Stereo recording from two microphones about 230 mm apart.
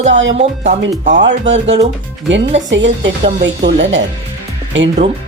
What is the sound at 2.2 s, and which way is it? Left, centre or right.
Speech, right.